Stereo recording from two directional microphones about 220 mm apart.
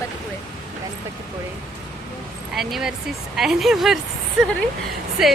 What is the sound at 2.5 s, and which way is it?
A woman's voice, centre (ahead or behind).